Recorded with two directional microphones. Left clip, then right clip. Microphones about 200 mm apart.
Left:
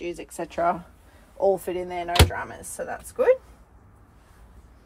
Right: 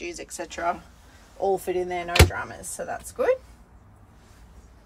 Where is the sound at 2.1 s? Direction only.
Centre (ahead or behind).